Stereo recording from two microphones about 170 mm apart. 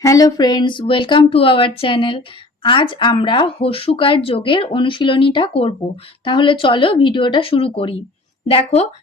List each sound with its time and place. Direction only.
0.0 s speech: 20° left (ahead or behind); by 8.9 s 35° left (ahead or behind)